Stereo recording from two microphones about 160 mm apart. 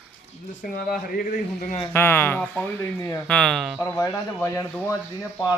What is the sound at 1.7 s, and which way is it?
Speech, 15° left (ahead or behind).